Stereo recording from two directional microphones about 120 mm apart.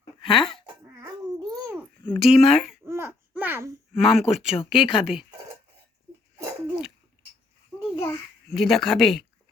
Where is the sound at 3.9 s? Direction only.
5° right (ahead or behind).